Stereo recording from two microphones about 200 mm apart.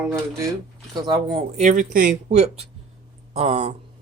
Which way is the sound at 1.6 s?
40° right (ahead or behind).